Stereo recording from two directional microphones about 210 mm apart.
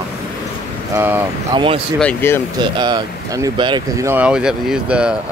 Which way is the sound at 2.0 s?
10° left (ahead or behind).